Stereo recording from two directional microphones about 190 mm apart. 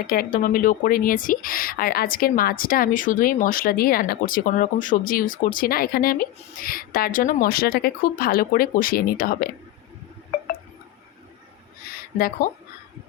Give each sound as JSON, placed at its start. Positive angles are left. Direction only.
{"t": 0.0, "sound": "speech", "side_deg": 50}
{"t": 12.4, "sound": "speech", "side_deg": 45}